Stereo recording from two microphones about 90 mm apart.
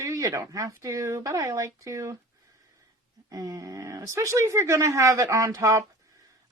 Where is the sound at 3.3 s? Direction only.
40° right (ahead or behind).